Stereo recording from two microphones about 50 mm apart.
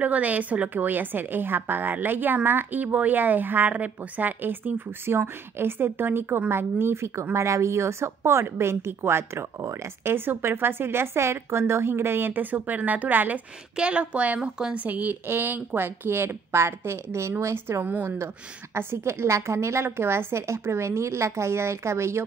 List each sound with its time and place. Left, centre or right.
0.0 s a woman's voice: right
5.1 s a woman's voice: right
7.3 s a woman's voice: right
10.0 s a woman's voice: right
13.7 s a woman's voice: right
15.2 s a woman's voice: right
17.4 s speech: right
18.0 s a woman's voice: right